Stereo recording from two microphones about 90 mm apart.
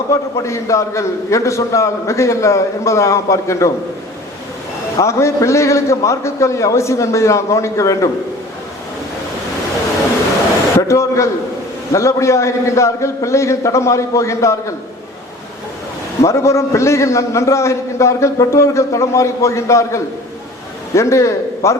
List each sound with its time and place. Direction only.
0.1 s a man's voice: 35° left (ahead or behind)
4.9 s a man's voice: 35° left (ahead or behind)
10.8 s a man's voice: 35° left (ahead or behind)
16.2 s a man's voice: 35° left (ahead or behind)